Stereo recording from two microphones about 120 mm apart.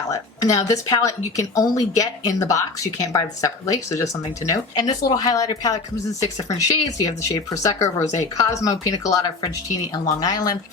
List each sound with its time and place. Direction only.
0.1 s speech: 30° left (ahead or behind)